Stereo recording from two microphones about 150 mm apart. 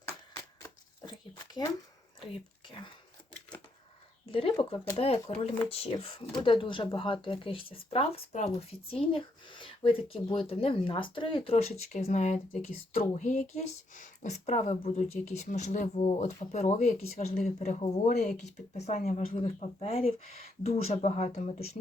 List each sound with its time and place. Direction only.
2.2 s whispering: 30° left (ahead or behind)
4.3 s speech: 35° left (ahead or behind)
9.1 s speech: 35° left (ahead or behind)